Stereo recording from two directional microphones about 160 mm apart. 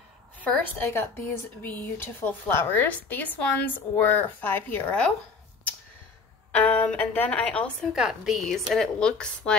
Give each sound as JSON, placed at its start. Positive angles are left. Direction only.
{"t": 0.4, "sound": "speech", "side_deg": 15}
{"t": 6.5, "sound": "a woman's voice", "side_deg": 10}